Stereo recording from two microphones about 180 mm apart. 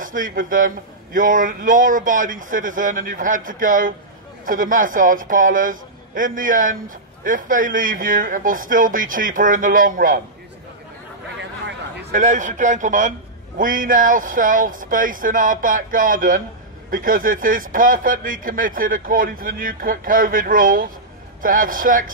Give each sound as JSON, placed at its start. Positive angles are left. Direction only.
{"t": 0.0, "sound": "speech", "side_deg": -50}
{"t": 11.3, "sound": "a sound", "side_deg": -80}
{"t": 12.1, "sound": "speech", "side_deg": -45}